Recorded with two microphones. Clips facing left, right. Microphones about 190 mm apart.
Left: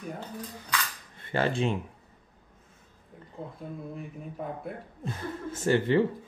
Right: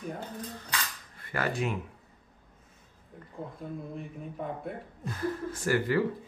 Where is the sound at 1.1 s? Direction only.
25° left (ahead or behind).